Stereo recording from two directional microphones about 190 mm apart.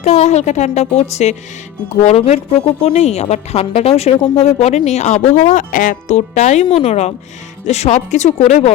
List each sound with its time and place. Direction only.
0.0 s a woman's voice: 35° left (ahead or behind)